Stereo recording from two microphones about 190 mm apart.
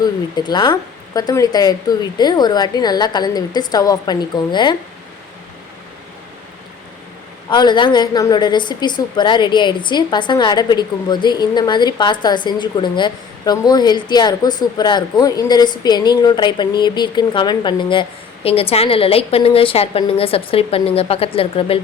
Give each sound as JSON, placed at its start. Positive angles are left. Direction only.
{"t": 0.0, "sound": "a woman's voice", "side_deg": 20}
{"t": 7.5, "sound": "a woman's voice", "side_deg": 25}